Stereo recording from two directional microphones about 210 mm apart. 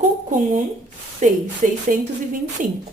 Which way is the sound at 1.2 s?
40° right (ahead or behind).